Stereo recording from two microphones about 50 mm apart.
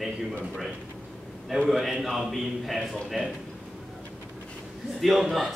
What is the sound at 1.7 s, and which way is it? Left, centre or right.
A man's voice, centre.